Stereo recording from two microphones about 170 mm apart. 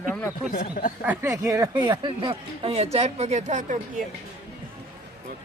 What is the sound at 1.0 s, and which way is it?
Speech, 15° right (ahead or behind).